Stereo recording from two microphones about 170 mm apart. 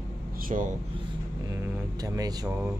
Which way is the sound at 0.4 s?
50° right (ahead or behind).